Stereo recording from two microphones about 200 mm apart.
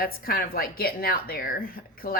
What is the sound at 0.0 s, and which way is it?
A woman's voice, 45° left (ahead or behind).